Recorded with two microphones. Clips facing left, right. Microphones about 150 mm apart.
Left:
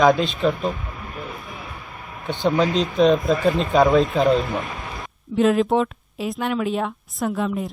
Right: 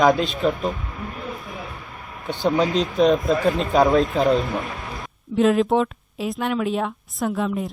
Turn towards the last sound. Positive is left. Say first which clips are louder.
# even
turn(degrees=0)  # may be behind; listen again after turning